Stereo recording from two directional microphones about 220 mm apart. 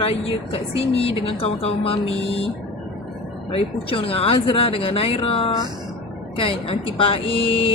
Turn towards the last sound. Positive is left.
turn(degrees=25)  # may be behind; listen again after turning